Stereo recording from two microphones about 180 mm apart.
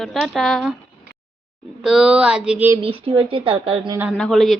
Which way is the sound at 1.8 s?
5° right (ahead or behind).